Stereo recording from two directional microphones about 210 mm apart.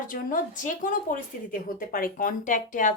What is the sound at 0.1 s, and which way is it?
Speech, 40° left (ahead or behind).